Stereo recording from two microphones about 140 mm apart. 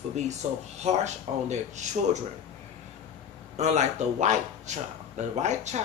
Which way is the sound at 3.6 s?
55° right (ahead or behind).